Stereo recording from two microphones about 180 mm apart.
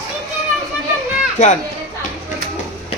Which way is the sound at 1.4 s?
45° left (ahead or behind).